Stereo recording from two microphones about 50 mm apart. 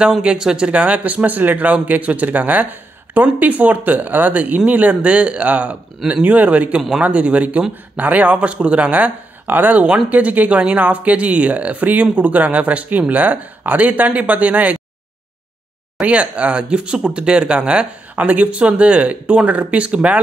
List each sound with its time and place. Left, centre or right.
0.0 s speech: centre
0.7 s speech: right
16.0 s speech: right
18.1 s speech: right